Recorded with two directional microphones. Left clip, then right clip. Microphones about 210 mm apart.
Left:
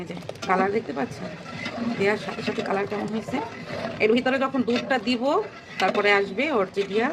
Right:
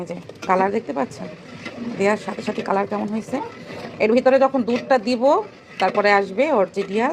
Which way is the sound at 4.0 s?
15° right (ahead or behind).